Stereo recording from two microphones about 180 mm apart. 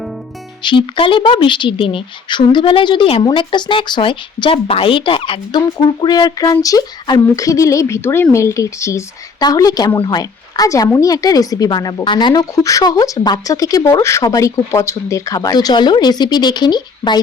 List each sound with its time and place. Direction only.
0.6 s speech: 25° left (ahead or behind)